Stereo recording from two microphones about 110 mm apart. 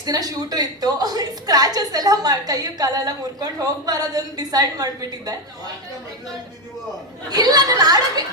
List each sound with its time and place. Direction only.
0.0 s a woman's voice: 35° right (ahead or behind)
7.3 s a woman's voice: 35° right (ahead or behind)